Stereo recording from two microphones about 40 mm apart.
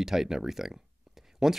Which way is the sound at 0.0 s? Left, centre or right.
Centre.